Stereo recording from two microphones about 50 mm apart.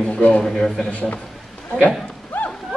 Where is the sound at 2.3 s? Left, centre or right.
Left.